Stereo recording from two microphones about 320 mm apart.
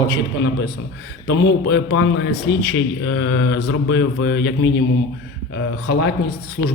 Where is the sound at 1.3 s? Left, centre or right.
Left.